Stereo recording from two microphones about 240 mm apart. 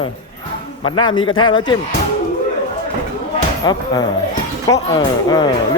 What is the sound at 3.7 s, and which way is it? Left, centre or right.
Speech, centre.